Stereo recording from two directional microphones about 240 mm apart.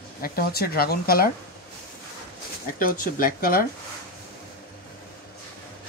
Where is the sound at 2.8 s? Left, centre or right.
Left.